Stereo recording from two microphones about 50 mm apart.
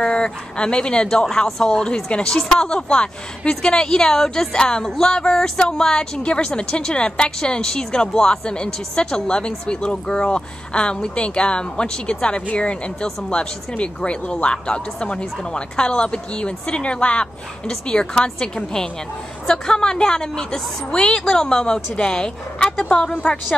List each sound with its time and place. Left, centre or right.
0.0 s a woman's voice: centre